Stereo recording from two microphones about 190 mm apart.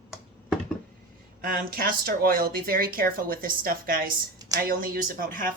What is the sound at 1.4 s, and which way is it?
Speech, 50° right (ahead or behind).